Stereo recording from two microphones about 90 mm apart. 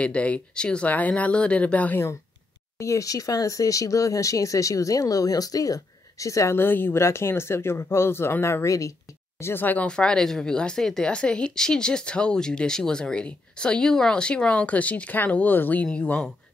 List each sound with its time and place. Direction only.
0.0 s speech: 15° left (ahead or behind)
2.8 s speech: 35° left (ahead or behind)
9.4 s speech: 25° left (ahead or behind)